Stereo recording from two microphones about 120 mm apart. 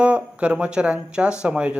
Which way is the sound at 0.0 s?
10° right (ahead or behind).